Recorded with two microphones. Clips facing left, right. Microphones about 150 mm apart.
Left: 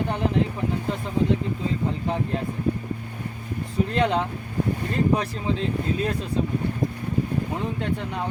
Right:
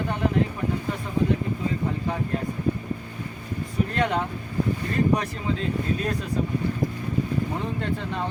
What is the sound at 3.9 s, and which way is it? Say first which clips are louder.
Speech: left 3 dB; 30° left (ahead or behind).